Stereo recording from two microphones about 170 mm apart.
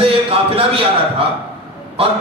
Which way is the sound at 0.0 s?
35° right (ahead or behind).